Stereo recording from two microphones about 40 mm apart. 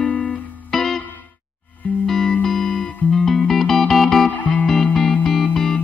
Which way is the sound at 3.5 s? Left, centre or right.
Centre.